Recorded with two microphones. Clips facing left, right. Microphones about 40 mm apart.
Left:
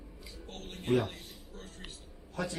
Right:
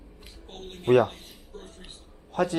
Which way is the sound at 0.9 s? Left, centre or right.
Right.